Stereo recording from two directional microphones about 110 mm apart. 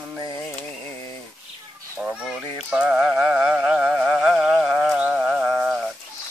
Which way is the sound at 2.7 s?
10° right (ahead or behind).